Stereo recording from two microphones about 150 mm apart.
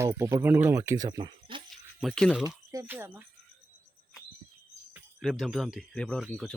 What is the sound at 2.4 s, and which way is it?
Speech, 20° right (ahead or behind).